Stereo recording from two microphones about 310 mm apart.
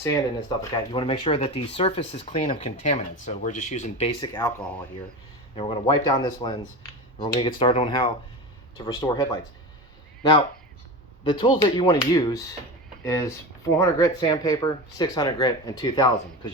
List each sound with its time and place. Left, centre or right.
0.0 s speech: centre
5.5 s speech: centre
11.2 s speech: centre